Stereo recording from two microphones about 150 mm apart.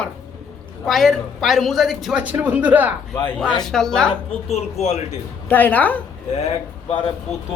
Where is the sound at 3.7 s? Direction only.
5° left (ahead or behind).